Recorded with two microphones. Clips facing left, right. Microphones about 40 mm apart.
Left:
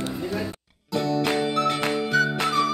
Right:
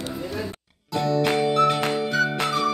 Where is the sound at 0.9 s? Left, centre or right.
Centre.